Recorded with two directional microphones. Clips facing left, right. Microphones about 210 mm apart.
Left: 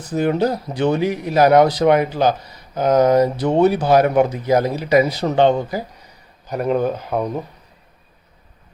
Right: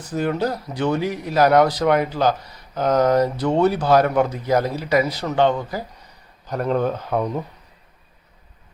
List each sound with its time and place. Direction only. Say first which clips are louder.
0.2 s a man's voice: left 4 dB; 20° left (ahead or behind)
6.5 s speech: left 2 dB; 10° left (ahead or behind)